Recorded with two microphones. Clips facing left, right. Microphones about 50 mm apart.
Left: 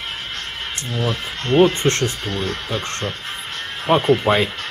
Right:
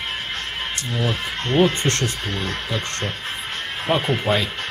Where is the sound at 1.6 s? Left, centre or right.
Left.